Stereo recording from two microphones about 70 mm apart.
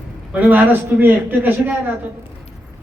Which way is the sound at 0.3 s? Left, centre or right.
Right.